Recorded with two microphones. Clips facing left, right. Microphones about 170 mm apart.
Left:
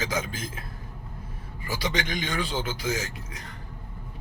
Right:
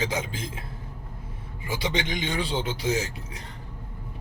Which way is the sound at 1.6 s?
25° right (ahead or behind).